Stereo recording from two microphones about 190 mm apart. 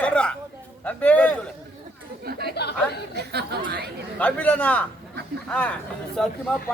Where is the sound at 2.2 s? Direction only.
55° right (ahead or behind).